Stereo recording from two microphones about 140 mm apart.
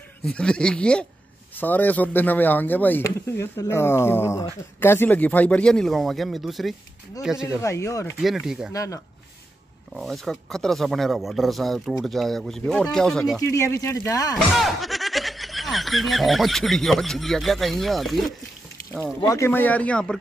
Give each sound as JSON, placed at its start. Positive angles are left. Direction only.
{"t": 0.2, "sound": "speech", "side_deg": 5}
{"t": 7.6, "sound": "speech", "side_deg": 20}
{"t": 8.2, "sound": "speech", "side_deg": 0}
{"t": 8.7, "sound": "speech", "side_deg": 25}
{"t": 9.9, "sound": "speech", "side_deg": 0}
{"t": 13.5, "sound": "speech", "side_deg": 20}
{"t": 14.5, "sound": "speech", "side_deg": 0}
{"t": 19.2, "sound": "speech", "side_deg": 20}